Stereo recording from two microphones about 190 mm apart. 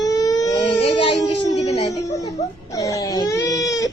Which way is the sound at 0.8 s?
25° left (ahead or behind).